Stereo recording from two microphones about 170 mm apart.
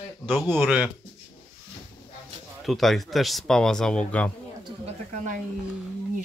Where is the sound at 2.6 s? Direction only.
Centre (ahead or behind).